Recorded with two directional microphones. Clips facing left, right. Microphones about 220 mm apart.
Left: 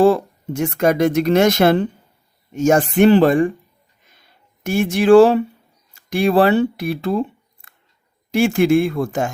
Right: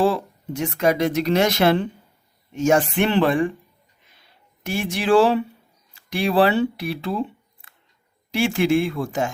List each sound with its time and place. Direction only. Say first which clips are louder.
0.0 s speech: left 6 dB; 45° left (ahead or behind)
4.0 s a sound: left 2 dB; 45° left (ahead or behind)
5.9 s speech: left 5 dB; 45° left (ahead or behind)